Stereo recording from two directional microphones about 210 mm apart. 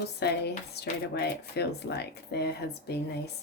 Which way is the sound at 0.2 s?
50° left (ahead or behind).